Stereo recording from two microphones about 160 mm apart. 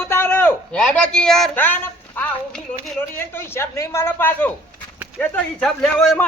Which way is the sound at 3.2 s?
15° left (ahead or behind).